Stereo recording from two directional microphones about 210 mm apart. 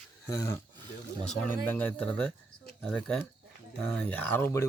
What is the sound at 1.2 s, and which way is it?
A man's voice, 5° left (ahead or behind).